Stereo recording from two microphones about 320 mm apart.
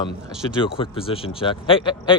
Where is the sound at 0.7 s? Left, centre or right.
Centre.